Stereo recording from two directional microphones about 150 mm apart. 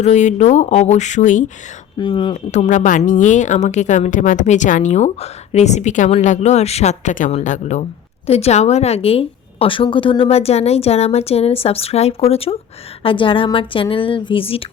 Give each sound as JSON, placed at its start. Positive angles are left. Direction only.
{"t": 0.0, "sound": "speech", "side_deg": 50}
{"t": 2.0, "sound": "a woman's voice", "side_deg": 35}
{"t": 2.3, "sound": "a woman's voice", "side_deg": 50}